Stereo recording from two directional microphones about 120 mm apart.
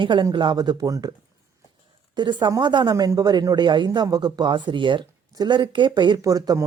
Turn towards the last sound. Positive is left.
turn(degrees=-30)  # may be behind; listen again after turning